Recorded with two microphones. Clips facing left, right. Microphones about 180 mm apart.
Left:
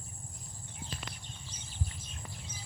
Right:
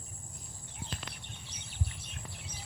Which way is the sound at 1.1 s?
65° right (ahead or behind).